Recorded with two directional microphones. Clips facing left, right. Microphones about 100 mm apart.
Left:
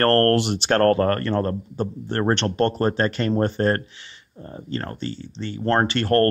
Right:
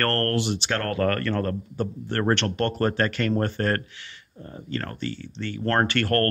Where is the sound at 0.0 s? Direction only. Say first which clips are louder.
Left 7 dB; 40° left (ahead or behind).